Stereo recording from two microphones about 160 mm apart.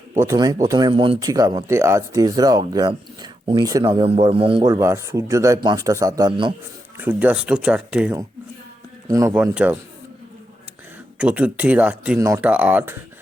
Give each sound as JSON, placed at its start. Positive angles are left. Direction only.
{"t": 0.2, "sound": "speech", "side_deg": -20}
{"t": 4.6, "sound": "speech", "side_deg": -20}
{"t": 6.9, "sound": "speech", "side_deg": -10}
{"t": 9.0, "sound": "speech", "side_deg": -20}
{"t": 9.3, "sound": "speech", "side_deg": -10}
{"t": 11.2, "sound": "speech", "side_deg": -5}